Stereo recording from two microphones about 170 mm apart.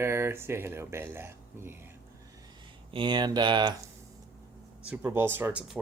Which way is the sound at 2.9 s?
25° right (ahead or behind).